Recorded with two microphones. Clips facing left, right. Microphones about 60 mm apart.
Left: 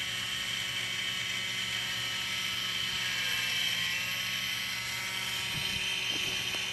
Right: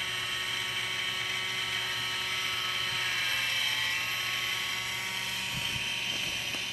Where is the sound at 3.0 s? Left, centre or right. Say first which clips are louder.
Right 1 dB; right.